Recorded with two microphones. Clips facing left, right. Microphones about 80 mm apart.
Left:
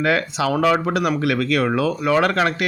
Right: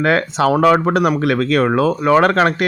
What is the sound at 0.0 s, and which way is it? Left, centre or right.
Speech, right.